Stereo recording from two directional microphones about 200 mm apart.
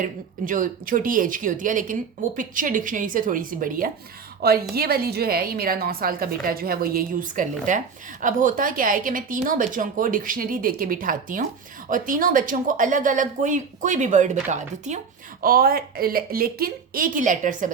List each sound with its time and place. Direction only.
0.0 s speech: 40° right (ahead or behind)